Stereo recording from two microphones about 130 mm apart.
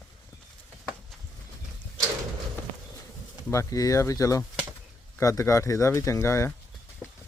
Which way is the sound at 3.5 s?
25° left (ahead or behind).